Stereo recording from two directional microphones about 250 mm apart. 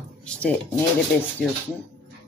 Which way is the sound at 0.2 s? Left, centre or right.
Centre.